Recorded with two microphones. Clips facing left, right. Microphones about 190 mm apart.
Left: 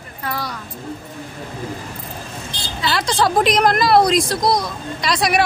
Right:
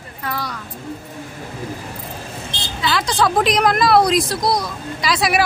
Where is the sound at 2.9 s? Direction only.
Centre (ahead or behind).